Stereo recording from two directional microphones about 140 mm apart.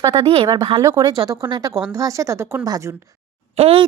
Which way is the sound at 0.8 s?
25° right (ahead or behind).